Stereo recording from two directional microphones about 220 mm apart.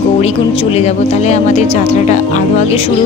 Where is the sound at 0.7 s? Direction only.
30° left (ahead or behind).